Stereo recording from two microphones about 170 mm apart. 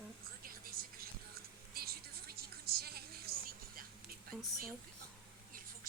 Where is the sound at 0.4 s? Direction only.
60° right (ahead or behind).